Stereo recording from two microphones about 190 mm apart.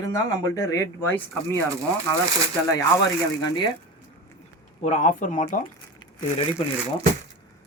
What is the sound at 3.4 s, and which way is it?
Speech, 25° left (ahead or behind).